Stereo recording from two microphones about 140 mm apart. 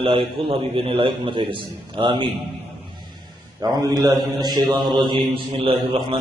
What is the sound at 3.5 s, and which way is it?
A man's voice, 25° right (ahead or behind).